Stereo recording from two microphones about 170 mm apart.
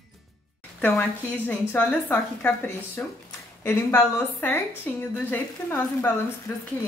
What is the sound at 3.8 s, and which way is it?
A woman's voice, 15° left (ahead or behind).